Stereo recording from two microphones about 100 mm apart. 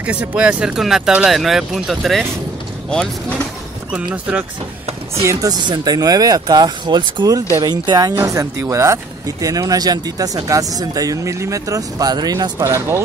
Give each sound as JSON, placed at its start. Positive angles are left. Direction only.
{"t": 0.0, "sound": "speech", "side_deg": -15}
{"t": 3.9, "sound": "speech", "side_deg": -15}
{"t": 5.3, "sound": "speech", "side_deg": -35}